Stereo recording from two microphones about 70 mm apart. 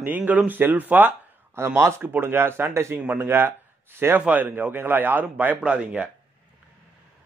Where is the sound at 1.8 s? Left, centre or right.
Right; by 6.0 s centre.